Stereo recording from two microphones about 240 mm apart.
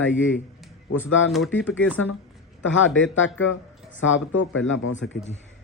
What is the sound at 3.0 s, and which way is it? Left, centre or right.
Speech, left.